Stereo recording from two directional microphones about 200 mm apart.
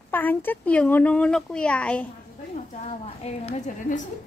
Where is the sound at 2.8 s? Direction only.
35° left (ahead or behind).